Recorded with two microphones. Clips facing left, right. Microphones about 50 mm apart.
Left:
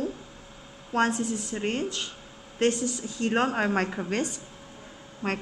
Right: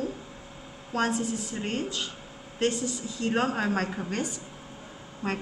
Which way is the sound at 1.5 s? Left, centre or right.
Left.